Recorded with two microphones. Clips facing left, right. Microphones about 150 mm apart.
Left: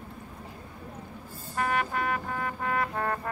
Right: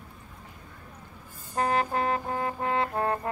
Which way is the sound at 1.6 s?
35° right (ahead or behind).